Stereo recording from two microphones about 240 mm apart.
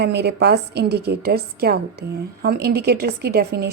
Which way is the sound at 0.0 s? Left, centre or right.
Right.